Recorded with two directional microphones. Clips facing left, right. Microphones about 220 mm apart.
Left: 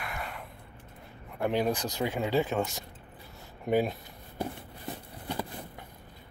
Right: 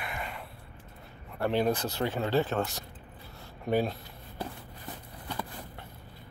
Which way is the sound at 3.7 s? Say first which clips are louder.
Left 1 dB; 15° left (ahead or behind).